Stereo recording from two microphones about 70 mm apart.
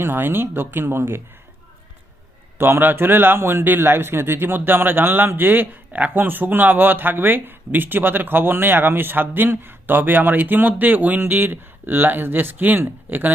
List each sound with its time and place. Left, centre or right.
0.0 s speech: right
2.6 s speech: right